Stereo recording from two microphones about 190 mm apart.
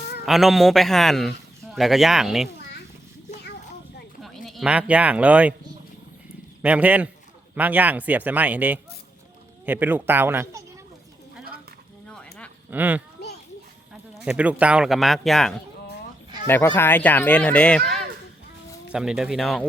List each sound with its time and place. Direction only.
0.3 s speech: centre (ahead or behind)
4.2 s speech: centre (ahead or behind)
6.6 s a man's voice: 5° right (ahead or behind)
12.0 s a sound: 5° left (ahead or behind)
12.7 s a man's voice: 10° right (ahead or behind)
14.3 s speech: 5° right (ahead or behind)